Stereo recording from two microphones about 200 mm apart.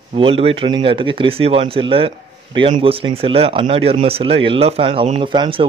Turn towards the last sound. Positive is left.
turn(degrees=-25)  # may be behind; listen again after turning